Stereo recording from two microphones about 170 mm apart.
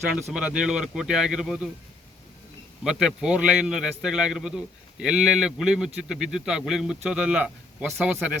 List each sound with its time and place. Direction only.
0.1 s a man's voice: 5° right (ahead or behind)
2.8 s a man's voice: 5° right (ahead or behind)